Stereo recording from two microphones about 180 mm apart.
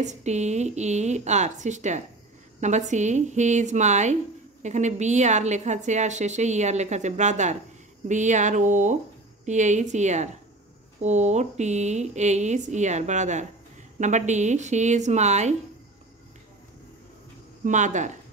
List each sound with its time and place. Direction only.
0.0 s a woman's voice: 40° right (ahead or behind)
17.6 s speech: 45° right (ahead or behind)